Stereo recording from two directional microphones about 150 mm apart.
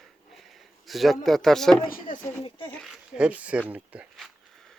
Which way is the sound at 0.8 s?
Centre (ahead or behind).